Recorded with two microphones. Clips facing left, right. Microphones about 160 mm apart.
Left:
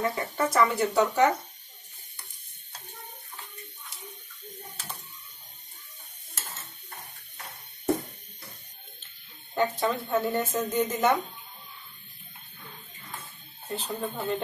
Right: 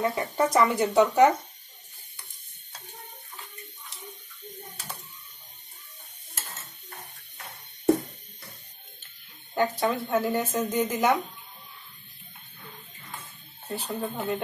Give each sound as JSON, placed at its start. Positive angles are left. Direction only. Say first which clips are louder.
{"t": 0.0, "sound": "speech", "louder": "right 3 dB", "side_deg": -20}
{"t": 9.5, "sound": "speech", "louder": "right 1 dB", "side_deg": -5}
{"t": 13.7, "sound": "speech", "louder": "right 1 dB", "side_deg": -10}